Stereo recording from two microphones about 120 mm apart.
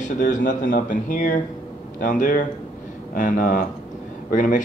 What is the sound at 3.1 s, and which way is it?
Speech, 90° left.